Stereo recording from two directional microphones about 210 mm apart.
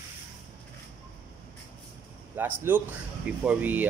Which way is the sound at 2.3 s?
10° right (ahead or behind).